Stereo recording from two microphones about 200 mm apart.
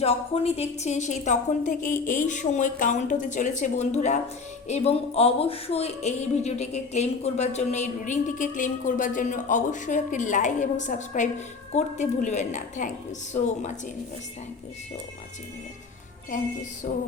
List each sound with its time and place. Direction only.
0.0 s speech: 30° left (ahead or behind)
16.9 s music: 45° left (ahead or behind)